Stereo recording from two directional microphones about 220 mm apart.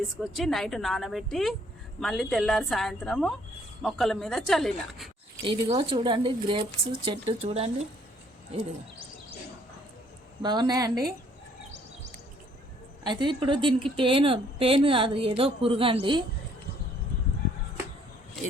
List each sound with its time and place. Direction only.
0.2 s a woman's voice: centre (ahead or behind)
5.5 s a woman's voice: 20° right (ahead or behind)
10.4 s a woman's voice: 20° right (ahead or behind)
13.1 s a woman's voice: 20° right (ahead or behind)